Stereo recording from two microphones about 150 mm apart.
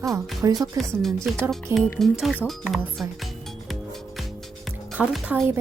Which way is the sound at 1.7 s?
20° right (ahead or behind).